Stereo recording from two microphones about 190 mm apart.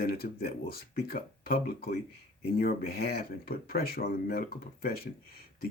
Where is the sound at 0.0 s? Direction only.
50° left (ahead or behind).